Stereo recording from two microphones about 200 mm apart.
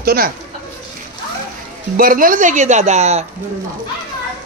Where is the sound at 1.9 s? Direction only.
45° right (ahead or behind).